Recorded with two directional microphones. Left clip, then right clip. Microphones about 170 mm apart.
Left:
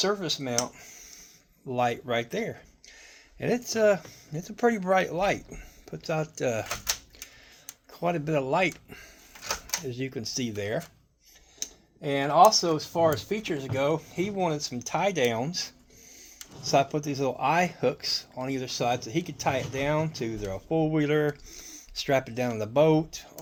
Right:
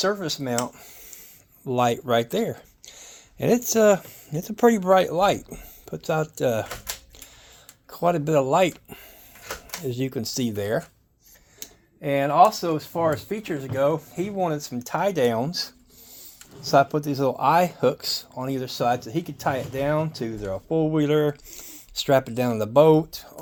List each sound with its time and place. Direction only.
0.0 s speech: 30° right (ahead or behind)
1.6 s speech: 55° right (ahead or behind)
6.4 s speech: 30° right (ahead or behind)
7.9 s speech: 45° right (ahead or behind)
12.0 s speech: 25° right (ahead or behind); by 23.3 s 40° right (ahead or behind)